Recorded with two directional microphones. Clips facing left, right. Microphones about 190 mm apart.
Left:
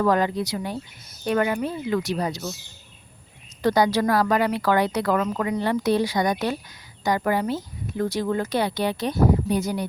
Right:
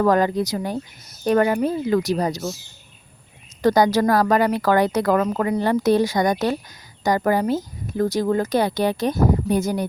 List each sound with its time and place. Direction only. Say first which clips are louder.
0.0 s a woman's voice: right 3 dB; 45° right (ahead or behind)
3.6 s a woman's voice: right 3 dB; 45° right (ahead or behind)